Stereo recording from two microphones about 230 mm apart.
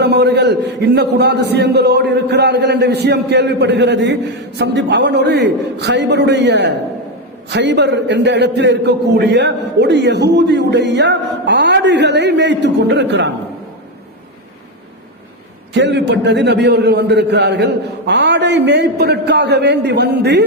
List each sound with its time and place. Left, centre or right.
0.0 s a man's voice: right
15.7 s a man's voice: right